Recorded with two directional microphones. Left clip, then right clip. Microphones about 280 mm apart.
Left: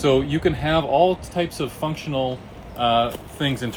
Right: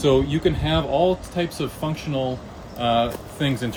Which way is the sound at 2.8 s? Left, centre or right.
Centre.